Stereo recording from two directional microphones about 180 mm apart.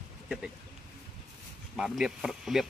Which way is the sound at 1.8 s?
5° right (ahead or behind).